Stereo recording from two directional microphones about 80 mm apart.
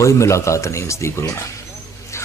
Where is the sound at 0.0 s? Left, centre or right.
Left.